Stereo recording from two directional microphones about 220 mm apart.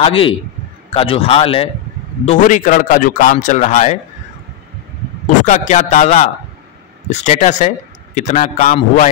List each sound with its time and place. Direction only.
0.0 s a man's voice: 25° left (ahead or behind)
5.4 s a man's voice: 35° left (ahead or behind)